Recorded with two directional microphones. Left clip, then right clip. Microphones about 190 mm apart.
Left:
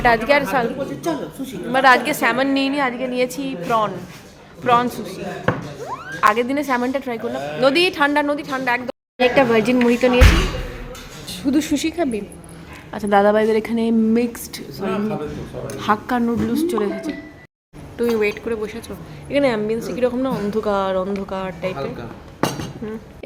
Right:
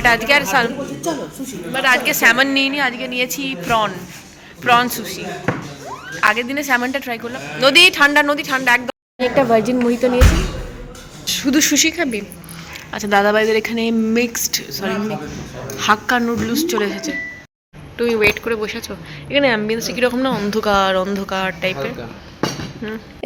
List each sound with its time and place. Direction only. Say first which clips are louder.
0.0 s a woman's voice: right 2 dB; 15° left (ahead or behind)
1.7 s a woman's voice: left 2 dB; 25° left (ahead or behind); by 10.2 s centre (ahead or behind)
11.3 s a woman's voice: right 4 dB; centre (ahead or behind)